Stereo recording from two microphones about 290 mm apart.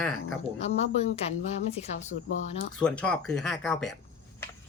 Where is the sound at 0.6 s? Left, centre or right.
Left.